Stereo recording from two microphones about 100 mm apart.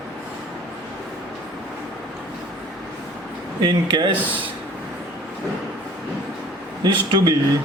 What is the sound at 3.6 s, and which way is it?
Speech, 50° right (ahead or behind).